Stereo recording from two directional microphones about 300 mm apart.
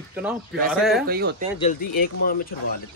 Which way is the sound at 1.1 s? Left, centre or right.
Right.